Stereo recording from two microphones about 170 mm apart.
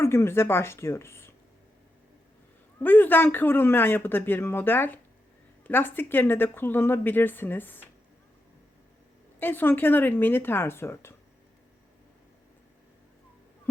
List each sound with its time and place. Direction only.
0.0 s speech: 15° left (ahead or behind)
2.8 s speech: 10° left (ahead or behind)
9.4 s speech: 10° left (ahead or behind)